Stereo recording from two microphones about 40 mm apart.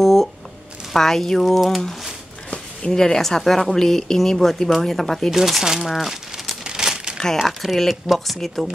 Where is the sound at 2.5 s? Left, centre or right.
Centre.